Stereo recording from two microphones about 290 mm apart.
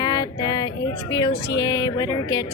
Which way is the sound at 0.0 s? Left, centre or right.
Centre.